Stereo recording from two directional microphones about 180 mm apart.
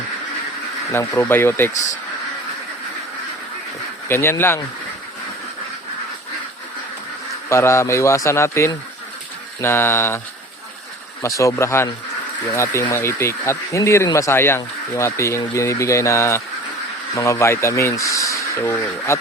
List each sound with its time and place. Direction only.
0.9 s speech: 15° left (ahead or behind)
4.1 s speech: 15° left (ahead or behind)
7.5 s speech: 15° left (ahead or behind)
11.2 s speech: 15° left (ahead or behind)